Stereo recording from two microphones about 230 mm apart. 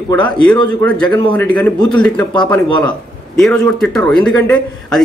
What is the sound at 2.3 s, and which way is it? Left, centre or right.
Speech, centre.